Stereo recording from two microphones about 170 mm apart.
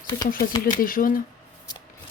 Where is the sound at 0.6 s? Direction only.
55° left (ahead or behind).